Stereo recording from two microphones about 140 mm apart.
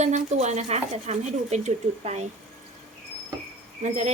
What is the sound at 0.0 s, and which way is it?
Speech, 55° right (ahead or behind).